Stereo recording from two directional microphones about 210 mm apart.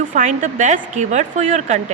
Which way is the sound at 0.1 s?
40° right (ahead or behind).